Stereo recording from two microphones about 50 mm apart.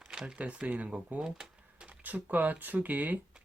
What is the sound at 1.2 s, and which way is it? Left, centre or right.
Cash register, centre.